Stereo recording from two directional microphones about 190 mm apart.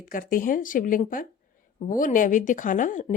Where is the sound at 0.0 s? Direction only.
45° left (ahead or behind).